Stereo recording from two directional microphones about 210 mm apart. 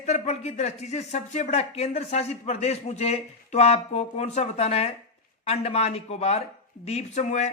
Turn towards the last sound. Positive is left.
turn(degrees=35)  # may be behind; listen again after turning